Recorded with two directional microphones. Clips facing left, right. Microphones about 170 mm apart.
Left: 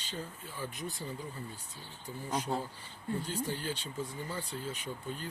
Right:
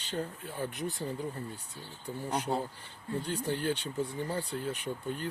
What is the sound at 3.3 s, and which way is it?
Speech, 60° right (ahead or behind).